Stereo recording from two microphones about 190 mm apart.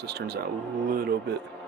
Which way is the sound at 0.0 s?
60° right (ahead or behind).